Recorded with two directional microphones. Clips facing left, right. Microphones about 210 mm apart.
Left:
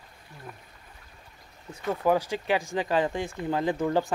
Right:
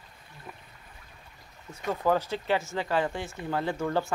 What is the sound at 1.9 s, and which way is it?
Speech, 15° left (ahead or behind).